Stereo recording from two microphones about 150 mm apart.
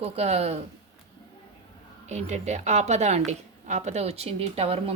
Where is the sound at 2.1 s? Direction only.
50° right (ahead or behind).